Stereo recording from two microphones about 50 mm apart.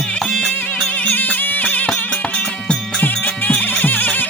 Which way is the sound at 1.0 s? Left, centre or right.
Left.